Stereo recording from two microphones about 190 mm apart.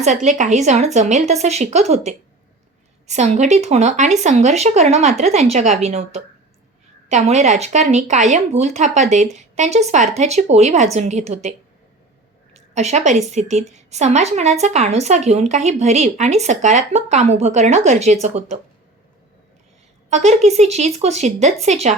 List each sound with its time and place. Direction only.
0.0 s a woman's voice: 40° right (ahead or behind)
12.5 s a woman's voice: 35° right (ahead or behind)
20.1 s a woman's voice: 35° right (ahead or behind)